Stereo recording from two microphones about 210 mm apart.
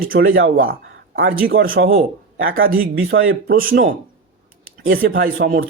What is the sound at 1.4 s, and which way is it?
Speech, 45° right (ahead or behind).